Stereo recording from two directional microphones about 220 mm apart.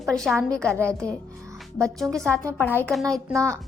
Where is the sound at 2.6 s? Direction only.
10° left (ahead or behind).